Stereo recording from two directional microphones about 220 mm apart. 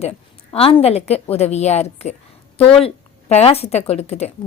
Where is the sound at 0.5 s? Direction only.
25° left (ahead or behind).